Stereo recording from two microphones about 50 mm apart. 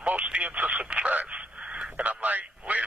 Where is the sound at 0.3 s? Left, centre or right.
Right.